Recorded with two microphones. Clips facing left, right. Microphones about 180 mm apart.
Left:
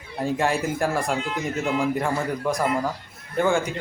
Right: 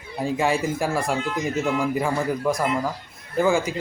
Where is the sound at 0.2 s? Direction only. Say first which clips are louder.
Right 1 dB; centre (ahead or behind).